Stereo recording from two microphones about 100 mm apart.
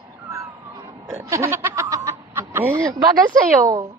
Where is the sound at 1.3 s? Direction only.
25° right (ahead or behind).